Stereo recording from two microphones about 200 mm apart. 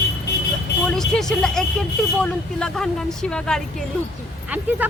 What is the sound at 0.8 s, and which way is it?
Speech, centre (ahead or behind).